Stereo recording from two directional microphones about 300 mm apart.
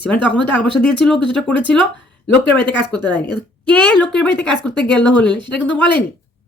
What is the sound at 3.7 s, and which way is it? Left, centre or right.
Speech, centre.